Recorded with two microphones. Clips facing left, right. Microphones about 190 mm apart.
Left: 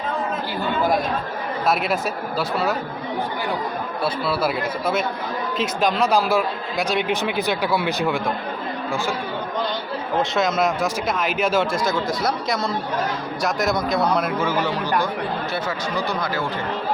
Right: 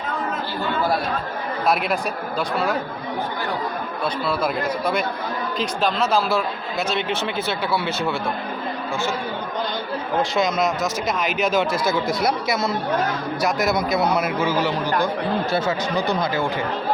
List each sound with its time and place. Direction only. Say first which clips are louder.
0.8 s speech: left 2 dB; 15° left (ahead or behind)
1.6 s speech: even; centre (ahead or behind)
4.0 s speech: left 1 dB; 5° left (ahead or behind)
10.3 s speech: left 1 dB; 5° left (ahead or behind)
15.5 s speech: right 3 dB; 25° right (ahead or behind)